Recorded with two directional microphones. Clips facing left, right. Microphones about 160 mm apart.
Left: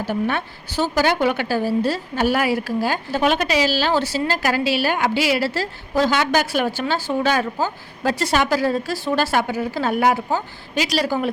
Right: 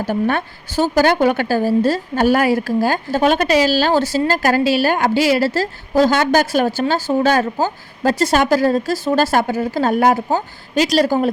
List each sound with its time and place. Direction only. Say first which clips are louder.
0.0 s a woman's voice: right 4 dB; 45° right (ahead or behind)